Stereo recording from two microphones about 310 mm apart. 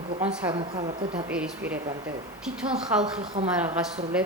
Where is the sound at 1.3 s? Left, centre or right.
Centre.